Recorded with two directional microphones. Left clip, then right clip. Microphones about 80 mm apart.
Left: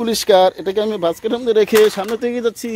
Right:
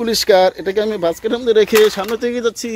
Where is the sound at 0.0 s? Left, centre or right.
Left.